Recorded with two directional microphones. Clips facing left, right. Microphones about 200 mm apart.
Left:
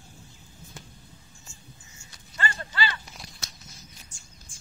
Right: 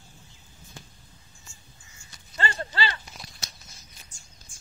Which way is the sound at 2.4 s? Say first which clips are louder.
Right 1 dB; 30° right (ahead or behind).